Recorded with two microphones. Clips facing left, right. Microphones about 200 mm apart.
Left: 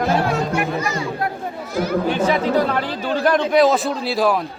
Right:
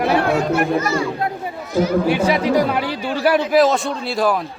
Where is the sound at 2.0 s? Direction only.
10° right (ahead or behind).